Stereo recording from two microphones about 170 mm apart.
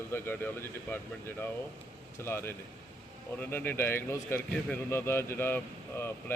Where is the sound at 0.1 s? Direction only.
10° left (ahead or behind).